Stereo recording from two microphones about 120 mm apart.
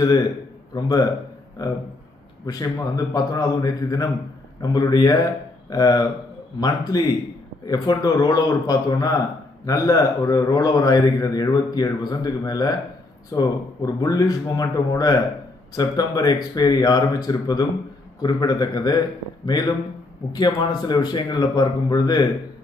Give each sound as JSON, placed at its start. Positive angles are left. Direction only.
{"t": 0.7, "sound": "a man's voice", "side_deg": 35}